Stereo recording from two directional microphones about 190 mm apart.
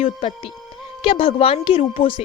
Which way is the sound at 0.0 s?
30° left (ahead or behind).